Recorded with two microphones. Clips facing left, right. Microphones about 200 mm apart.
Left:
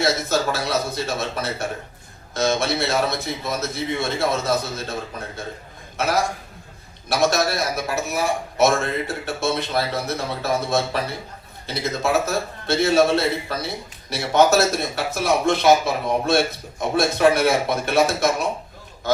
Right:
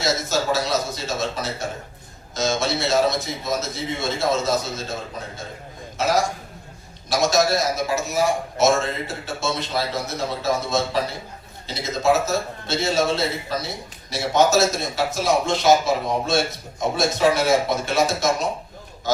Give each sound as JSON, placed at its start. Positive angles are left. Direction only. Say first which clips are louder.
{"t": 0.0, "sound": "a man's voice", "louder": "left 2 dB", "side_deg": 55}
{"t": 6.0, "sound": "a man's voice", "louder": "right 1 dB", "side_deg": 60}